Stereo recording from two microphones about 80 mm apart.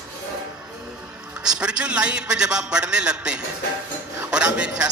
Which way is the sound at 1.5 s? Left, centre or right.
Centre.